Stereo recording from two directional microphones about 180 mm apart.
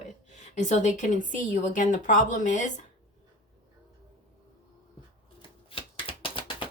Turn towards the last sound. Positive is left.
turn(degrees=30)  # may be behind; listen again after turning